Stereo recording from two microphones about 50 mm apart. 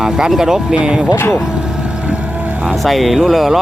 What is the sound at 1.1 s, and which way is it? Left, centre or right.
Speech, left.